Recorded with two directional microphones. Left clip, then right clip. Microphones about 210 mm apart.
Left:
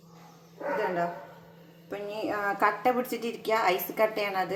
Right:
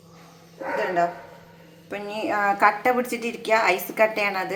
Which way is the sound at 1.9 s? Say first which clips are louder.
Right 5 dB; centre (ahead or behind).